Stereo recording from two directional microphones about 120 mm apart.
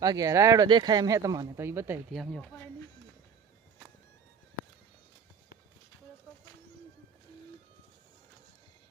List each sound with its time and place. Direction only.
0.0 s speech: 30° right (ahead or behind)
2.1 s speech: centre (ahead or behind)
2.4 s speech: 15° left (ahead or behind)
6.3 s bird: 25° left (ahead or behind)